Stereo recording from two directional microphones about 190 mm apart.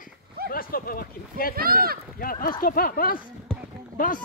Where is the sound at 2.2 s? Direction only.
50° left (ahead or behind).